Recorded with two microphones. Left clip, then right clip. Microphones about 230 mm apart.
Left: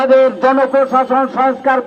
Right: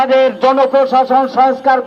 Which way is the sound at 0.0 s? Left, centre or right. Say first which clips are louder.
Even; right.